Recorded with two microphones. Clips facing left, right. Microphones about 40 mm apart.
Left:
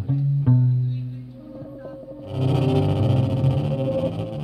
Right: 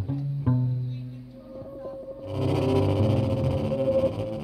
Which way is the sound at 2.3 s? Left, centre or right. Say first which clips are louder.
Left 2 dB; left.